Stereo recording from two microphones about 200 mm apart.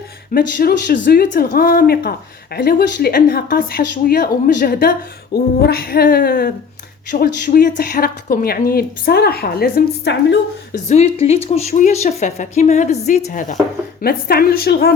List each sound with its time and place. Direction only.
0.3 s speech: 45° left (ahead or behind)
5.3 s a sound: 55° left (ahead or behind)
5.6 s speech: 50° left (ahead or behind)
10.8 s a woman's voice: 30° left (ahead or behind); by 14.9 s 50° left (ahead or behind)